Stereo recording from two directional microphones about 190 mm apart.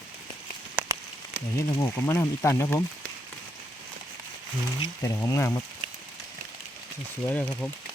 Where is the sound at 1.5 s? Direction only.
15° left (ahead or behind).